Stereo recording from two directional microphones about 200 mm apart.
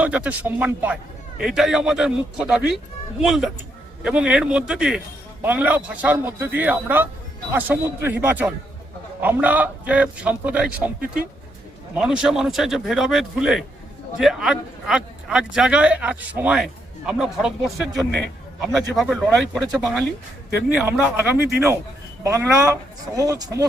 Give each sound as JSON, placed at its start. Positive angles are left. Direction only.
{"t": 0.0, "sound": "a man's voice", "side_deg": -5}
{"t": 11.9, "sound": "a man's voice", "side_deg": -5}